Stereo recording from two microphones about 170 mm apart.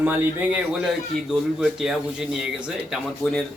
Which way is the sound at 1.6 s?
Centre (ahead or behind).